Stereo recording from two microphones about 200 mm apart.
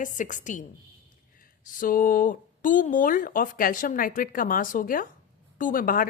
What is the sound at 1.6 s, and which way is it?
Speech, 40° left (ahead or behind).